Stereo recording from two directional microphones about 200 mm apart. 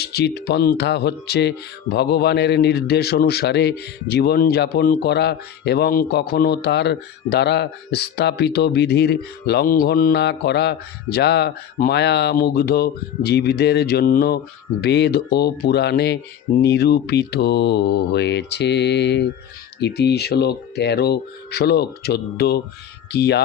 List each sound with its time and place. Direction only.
0.0 s speech: 55° left (ahead or behind)